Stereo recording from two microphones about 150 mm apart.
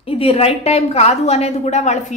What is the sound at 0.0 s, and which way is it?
A woman's voice, 40° left (ahead or behind).